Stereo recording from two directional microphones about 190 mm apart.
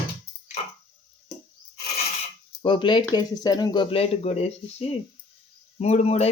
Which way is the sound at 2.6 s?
25° left (ahead or behind).